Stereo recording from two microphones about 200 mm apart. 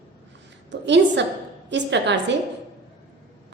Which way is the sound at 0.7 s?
60° right (ahead or behind).